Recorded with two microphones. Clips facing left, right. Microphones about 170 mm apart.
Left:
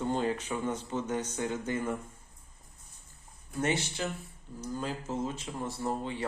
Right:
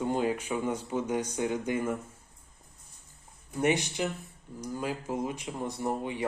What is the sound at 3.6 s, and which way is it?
Speech, 15° right (ahead or behind).